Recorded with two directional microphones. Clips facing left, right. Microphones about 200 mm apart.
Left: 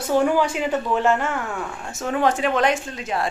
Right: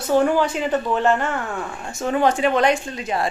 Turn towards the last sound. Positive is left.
turn(degrees=0)  # may be behind; listen again after turning